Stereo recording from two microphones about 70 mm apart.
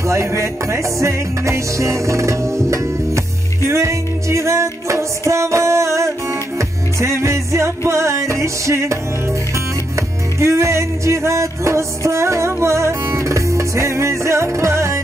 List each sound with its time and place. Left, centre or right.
0.0 s music: right
9.9 s music: right